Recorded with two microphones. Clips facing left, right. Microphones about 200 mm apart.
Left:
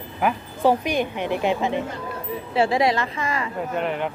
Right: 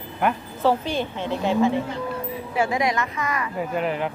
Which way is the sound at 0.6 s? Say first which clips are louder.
Left 2 dB; 15° left (ahead or behind).